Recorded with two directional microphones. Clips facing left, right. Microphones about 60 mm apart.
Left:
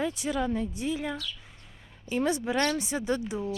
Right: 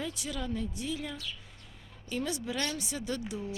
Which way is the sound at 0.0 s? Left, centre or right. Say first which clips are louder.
Left 8 dB; left.